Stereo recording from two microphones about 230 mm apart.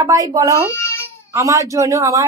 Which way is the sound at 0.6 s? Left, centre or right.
Centre.